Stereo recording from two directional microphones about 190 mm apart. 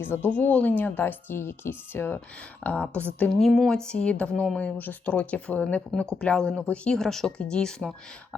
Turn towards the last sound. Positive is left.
turn(degrees=5)  # may be behind; listen again after turning